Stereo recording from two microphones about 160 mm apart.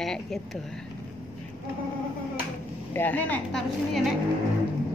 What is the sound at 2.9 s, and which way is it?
Speech, 10° left (ahead or behind).